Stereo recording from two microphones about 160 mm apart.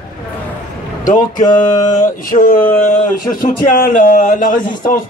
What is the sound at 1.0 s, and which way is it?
Speech, 55° left (ahead or behind).